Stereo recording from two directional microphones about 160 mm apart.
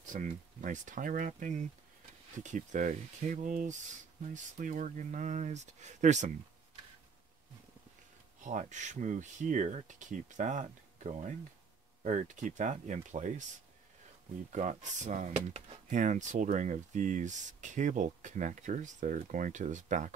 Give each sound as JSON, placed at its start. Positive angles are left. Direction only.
{"t": 0.0, "sound": "speech", "side_deg": -55}
{"t": 8.5, "sound": "speech", "side_deg": -50}
{"t": 14.5, "sound": "speech", "side_deg": -50}
{"t": 15.3, "sound": "speech", "side_deg": -35}
{"t": 15.9, "sound": "speech", "side_deg": -50}